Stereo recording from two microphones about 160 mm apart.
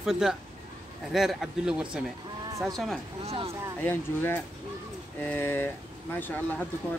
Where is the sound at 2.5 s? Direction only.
20° right (ahead or behind).